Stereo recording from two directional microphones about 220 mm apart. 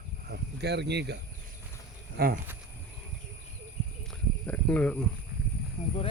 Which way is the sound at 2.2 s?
40° right (ahead or behind).